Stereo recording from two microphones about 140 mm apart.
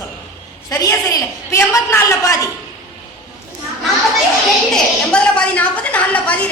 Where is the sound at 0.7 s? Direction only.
20° left (ahead or behind).